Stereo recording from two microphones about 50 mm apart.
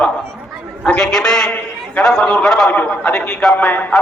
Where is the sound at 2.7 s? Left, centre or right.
Left.